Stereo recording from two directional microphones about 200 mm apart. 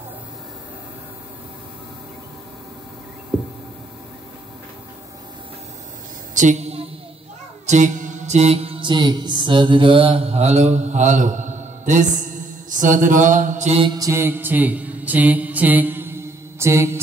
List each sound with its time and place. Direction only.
6.3 s a sound: 35° right (ahead or behind)
7.6 s mantra: 40° right (ahead or behind)
13.9 s mantra: 15° right (ahead or behind)